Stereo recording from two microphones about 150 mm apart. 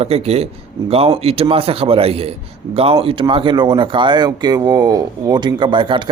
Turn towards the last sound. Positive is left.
turn(degrees=-35)  # may be behind; listen again after turning